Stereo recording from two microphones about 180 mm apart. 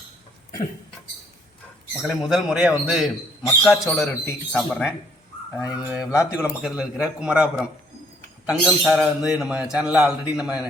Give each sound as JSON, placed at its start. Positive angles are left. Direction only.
{"t": 2.0, "sound": "a man's voice", "side_deg": -5}
{"t": 5.5, "sound": "speech", "side_deg": 15}
{"t": 5.9, "sound": "a man's voice", "side_deg": -5}